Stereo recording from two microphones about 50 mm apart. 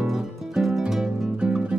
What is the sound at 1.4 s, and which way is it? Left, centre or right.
Music, centre.